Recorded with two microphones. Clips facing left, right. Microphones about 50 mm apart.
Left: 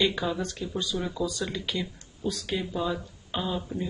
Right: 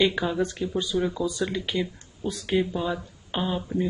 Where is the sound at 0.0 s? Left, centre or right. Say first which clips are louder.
Right 4 dB; centre.